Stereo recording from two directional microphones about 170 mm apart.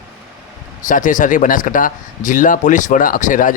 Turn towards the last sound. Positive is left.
turn(degrees=50)  # may be behind; listen again after turning